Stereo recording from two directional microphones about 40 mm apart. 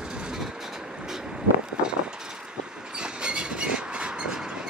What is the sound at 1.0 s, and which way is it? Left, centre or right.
Vehicle, centre.